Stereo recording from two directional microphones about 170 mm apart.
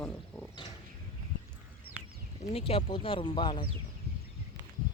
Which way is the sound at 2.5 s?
35° left (ahead or behind).